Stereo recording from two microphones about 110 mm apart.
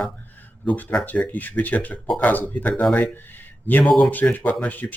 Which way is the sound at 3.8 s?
Centre (ahead or behind).